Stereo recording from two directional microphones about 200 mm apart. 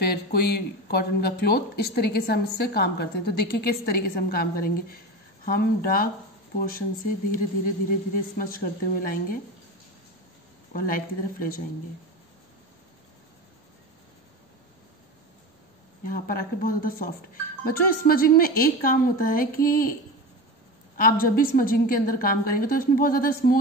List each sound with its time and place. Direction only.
0.0 s speech: 50° left (ahead or behind)
10.7 s speech: 45° left (ahead or behind)
16.1 s speech: 45° left (ahead or behind)
21.5 s speech: 45° left (ahead or behind)